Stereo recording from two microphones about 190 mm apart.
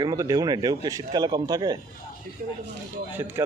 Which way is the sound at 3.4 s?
15° right (ahead or behind).